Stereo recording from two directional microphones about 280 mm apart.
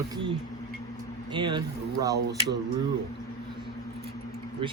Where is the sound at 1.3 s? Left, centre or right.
Centre.